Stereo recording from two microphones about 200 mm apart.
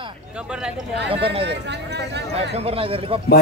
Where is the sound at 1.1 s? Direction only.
25° right (ahead or behind).